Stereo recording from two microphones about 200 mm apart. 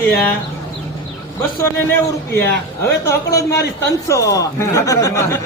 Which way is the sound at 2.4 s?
15° left (ahead or behind).